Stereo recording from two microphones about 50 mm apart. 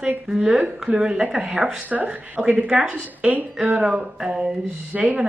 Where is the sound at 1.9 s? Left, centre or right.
Right; by 4.5 s centre.